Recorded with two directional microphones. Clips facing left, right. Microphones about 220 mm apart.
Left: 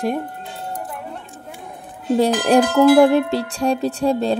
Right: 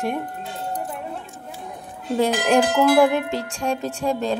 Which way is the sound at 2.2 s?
35° left (ahead or behind).